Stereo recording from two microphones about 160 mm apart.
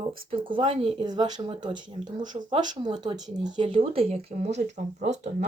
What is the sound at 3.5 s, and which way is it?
Speech, 30° right (ahead or behind).